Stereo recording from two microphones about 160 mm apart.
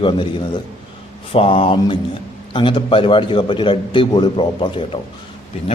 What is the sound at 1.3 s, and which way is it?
A man's voice, 35° left (ahead or behind).